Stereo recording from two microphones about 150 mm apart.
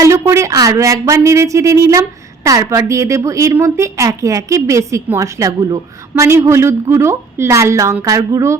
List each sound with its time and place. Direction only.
0.0 s speech: 20° right (ahead or behind)